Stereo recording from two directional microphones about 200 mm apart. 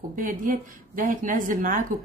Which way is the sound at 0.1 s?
40° right (ahead or behind).